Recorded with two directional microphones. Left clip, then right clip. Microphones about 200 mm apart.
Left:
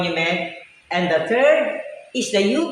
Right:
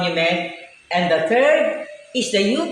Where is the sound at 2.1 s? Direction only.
15° left (ahead or behind).